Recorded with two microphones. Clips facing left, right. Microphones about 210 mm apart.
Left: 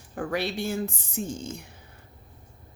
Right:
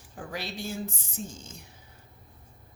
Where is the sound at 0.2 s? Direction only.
65° left (ahead or behind).